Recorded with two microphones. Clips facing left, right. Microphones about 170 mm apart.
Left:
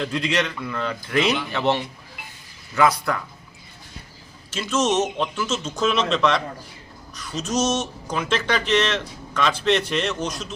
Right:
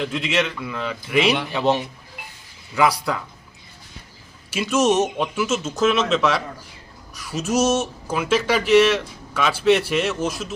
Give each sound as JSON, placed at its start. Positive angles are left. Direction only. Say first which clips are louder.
{"t": 0.0, "sound": "a man's voice", "louder": "right 1 dB", "side_deg": -5}
{"t": 4.5, "sound": "speech", "louder": "right 3 dB", "side_deg": -10}